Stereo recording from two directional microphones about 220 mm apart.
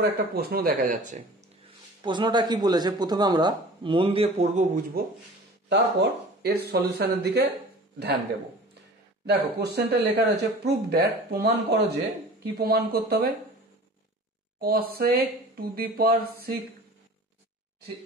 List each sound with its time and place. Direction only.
0.0 s speech: 45° right (ahead or behind)
2.0 s speech: 20° right (ahead or behind)
5.7 s speech: 45° right (ahead or behind)
9.2 s speech: 50° right (ahead or behind)
14.6 s speech: 45° right (ahead or behind)